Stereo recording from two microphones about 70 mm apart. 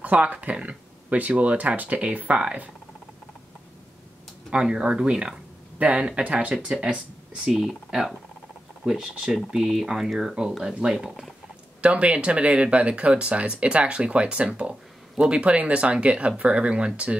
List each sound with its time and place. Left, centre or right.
0.0 s speech: centre
4.5 s speech: centre